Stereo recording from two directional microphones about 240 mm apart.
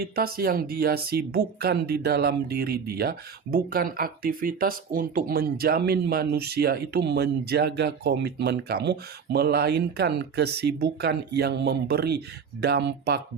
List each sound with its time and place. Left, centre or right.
0.0 s speech: right